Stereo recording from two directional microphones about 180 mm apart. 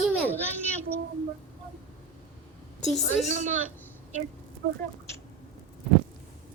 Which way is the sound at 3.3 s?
40° right (ahead or behind).